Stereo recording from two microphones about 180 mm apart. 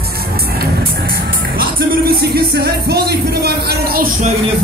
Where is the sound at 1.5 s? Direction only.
60° right (ahead or behind).